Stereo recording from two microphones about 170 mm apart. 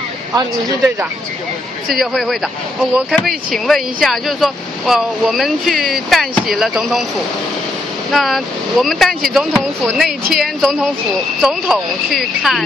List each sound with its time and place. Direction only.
0.3 s speech: 20° right (ahead or behind)
1.9 s speech: centre (ahead or behind)
8.1 s speech: centre (ahead or behind)